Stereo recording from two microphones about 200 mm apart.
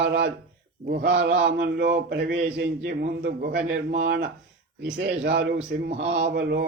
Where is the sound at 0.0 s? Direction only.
60° right (ahead or behind).